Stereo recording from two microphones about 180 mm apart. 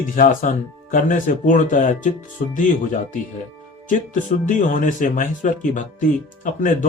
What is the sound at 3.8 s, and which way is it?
Speech, 45° left (ahead or behind).